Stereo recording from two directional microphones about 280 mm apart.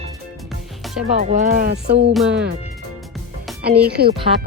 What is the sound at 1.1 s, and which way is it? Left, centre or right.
Speech, right.